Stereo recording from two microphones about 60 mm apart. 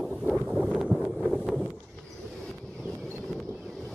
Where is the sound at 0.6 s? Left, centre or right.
Centre.